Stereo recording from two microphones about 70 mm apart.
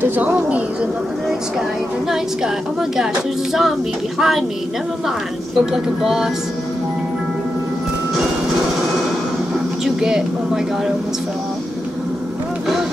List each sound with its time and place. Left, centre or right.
0.0 s speech: right
4.2 s speech: centre
5.7 s speech: centre
9.8 s speech: centre